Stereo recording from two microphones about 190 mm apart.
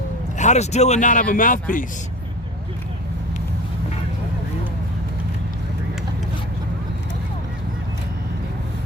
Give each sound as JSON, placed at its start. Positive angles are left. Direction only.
{"t": 0.3, "sound": "speech", "side_deg": 40}